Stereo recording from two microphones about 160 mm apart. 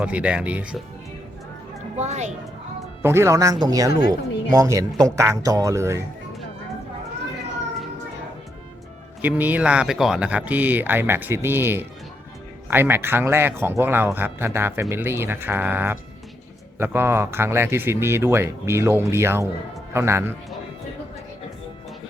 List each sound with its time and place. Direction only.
0.0 s speech: 5° right (ahead or behind)
2.0 s a woman's voice: 45° right (ahead or behind)
3.0 s speech: 15° right (ahead or behind)
9.2 s speech: 10° right (ahead or behind)